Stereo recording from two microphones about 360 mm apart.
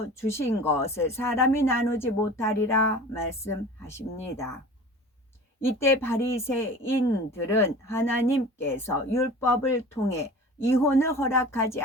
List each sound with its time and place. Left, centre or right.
0.1 s speech: centre
5.5 s speech: centre